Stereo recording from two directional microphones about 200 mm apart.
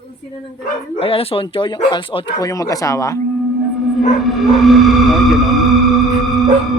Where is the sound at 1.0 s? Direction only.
30° left (ahead or behind).